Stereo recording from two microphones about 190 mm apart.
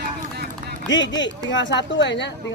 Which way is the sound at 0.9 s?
75° left (ahead or behind).